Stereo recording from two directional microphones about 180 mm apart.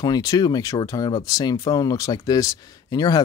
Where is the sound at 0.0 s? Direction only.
20° left (ahead or behind).